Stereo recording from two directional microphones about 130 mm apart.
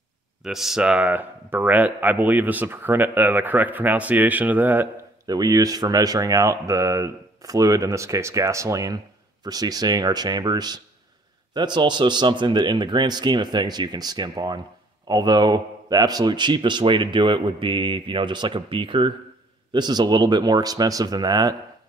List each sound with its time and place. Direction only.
0.4 s speech: 5° right (ahead or behind)
5.2 s speech: 30° right (ahead or behind)